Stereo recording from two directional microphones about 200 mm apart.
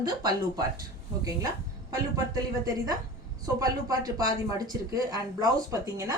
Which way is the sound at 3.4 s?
20° right (ahead or behind).